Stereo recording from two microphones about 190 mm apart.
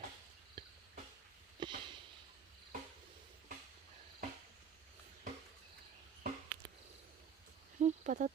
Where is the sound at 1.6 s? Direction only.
25° right (ahead or behind).